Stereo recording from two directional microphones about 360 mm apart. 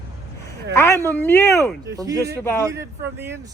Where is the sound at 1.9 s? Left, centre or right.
Centre.